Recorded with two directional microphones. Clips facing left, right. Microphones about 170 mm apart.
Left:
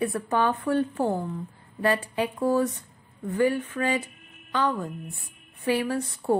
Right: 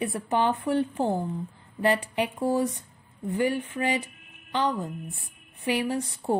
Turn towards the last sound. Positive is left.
turn(degrees=-15)  # may be behind; listen again after turning